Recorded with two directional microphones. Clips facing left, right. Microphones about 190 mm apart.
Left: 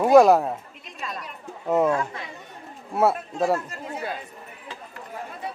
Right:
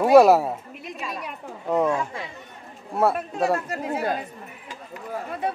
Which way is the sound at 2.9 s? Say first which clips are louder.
Even; 5° left (ahead or behind).